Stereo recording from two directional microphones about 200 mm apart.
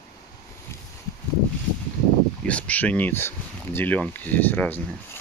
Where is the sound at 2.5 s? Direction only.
5° left (ahead or behind).